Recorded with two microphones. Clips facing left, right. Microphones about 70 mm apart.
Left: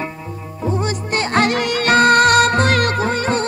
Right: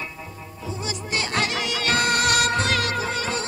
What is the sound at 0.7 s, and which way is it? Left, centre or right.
Music, left.